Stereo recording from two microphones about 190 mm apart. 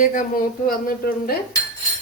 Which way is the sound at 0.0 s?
40° left (ahead or behind).